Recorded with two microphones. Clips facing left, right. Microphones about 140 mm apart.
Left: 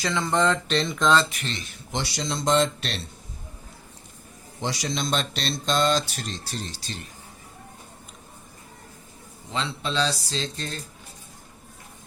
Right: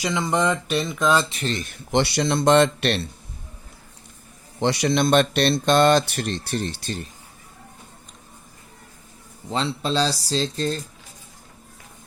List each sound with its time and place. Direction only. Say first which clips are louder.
0.0 s speech: right 1 dB; 15° right (ahead or behind)
1.3 s speech: right 7 dB; 30° right (ahead or behind)
1.5 s speech: right 12 dB; 55° right (ahead or behind)
4.6 s speech: right 9 dB; 65° right (ahead or behind)
9.5 s speech: right 5 dB; 35° right (ahead or behind)